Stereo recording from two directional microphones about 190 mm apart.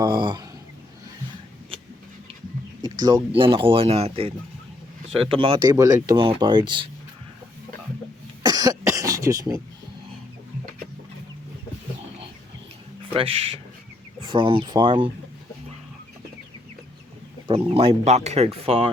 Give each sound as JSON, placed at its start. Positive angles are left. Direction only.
{"t": 0.0, "sound": "a sound", "side_deg": -25}
{"t": 3.0, "sound": "speech", "side_deg": -20}
{"t": 8.4, "sound": "cough", "side_deg": -20}
{"t": 8.9, "sound": "a sound", "side_deg": -15}
{"t": 13.1, "sound": "speech", "side_deg": -30}
{"t": 17.5, "sound": "speech", "side_deg": -30}